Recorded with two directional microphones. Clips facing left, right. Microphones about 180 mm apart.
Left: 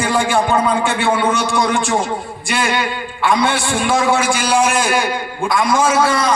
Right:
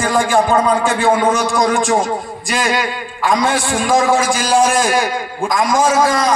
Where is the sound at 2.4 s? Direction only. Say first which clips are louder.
Right 1 dB; 40° right (ahead or behind).